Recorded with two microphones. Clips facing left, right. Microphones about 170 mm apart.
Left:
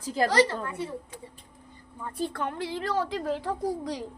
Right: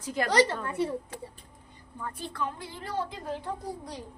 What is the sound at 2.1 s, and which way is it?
Speech, 40° left (ahead or behind).